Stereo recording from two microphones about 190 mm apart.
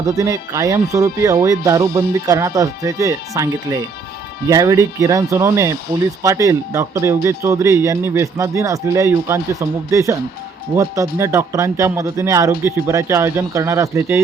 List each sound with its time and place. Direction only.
0.0 s speech: 20° right (ahead or behind)